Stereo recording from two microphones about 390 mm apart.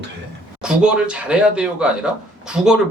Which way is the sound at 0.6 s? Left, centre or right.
Centre.